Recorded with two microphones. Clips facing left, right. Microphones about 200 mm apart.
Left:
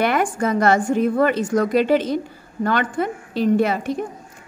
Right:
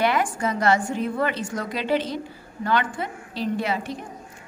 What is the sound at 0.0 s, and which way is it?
A woman's voice, 50° left (ahead or behind).